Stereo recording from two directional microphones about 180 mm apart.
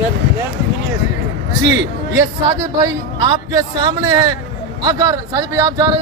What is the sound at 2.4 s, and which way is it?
Speech, 25° right (ahead or behind).